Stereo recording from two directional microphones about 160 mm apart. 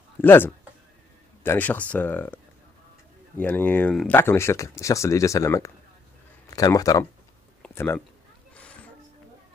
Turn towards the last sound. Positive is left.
turn(degrees=15)  # may be behind; listen again after turning